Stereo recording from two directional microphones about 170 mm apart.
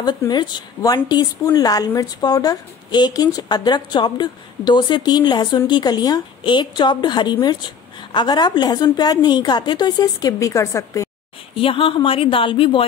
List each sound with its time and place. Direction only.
0.0 s a woman's voice: 25° left (ahead or behind)
11.5 s a woman's voice: 30° left (ahead or behind)